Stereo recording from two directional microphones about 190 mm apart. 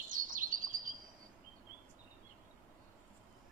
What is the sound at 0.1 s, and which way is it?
Chirp, 45° right (ahead or behind).